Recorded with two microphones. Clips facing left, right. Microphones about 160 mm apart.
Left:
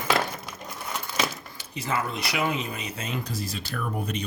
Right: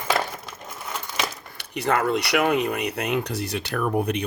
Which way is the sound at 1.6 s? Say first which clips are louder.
Right 7 dB; 65° right (ahead or behind).